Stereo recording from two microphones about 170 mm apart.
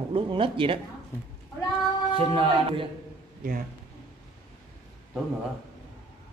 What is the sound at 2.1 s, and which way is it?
Mantra, 30° right (ahead or behind).